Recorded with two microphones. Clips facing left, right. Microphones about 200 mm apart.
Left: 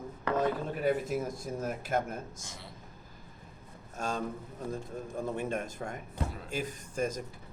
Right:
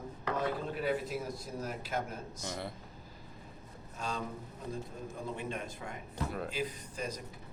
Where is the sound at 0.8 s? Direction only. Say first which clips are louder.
Left 5 dB; 50° left (ahead or behind).